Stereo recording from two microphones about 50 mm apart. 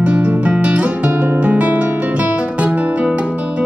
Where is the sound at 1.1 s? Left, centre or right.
Right.